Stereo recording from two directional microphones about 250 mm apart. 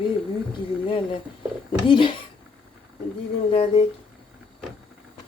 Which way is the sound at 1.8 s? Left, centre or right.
Centre.